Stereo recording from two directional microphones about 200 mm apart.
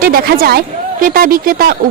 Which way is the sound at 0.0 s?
50° right (ahead or behind).